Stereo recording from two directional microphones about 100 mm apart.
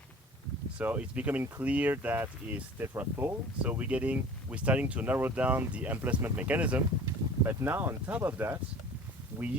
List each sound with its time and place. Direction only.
0.8 s speech: 15° right (ahead or behind)